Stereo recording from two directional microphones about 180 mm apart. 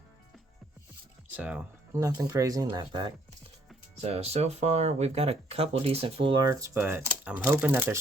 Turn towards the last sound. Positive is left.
turn(degrees=-10)  # may be behind; listen again after turning